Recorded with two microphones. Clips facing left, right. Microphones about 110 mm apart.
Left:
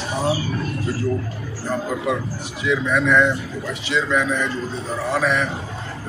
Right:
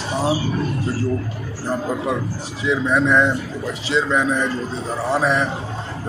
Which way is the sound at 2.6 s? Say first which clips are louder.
Right 1 dB; 30° right (ahead or behind).